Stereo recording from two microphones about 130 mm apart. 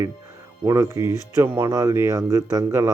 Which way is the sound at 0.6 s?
25° right (ahead or behind).